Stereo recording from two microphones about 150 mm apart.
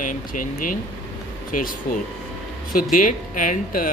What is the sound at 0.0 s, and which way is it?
Speech, 65° left (ahead or behind).